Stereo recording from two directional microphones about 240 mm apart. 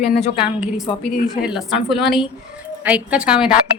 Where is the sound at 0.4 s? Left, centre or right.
Centre.